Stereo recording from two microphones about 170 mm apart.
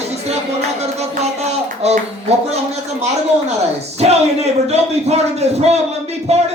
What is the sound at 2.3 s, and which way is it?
Speech, 40° right (ahead or behind).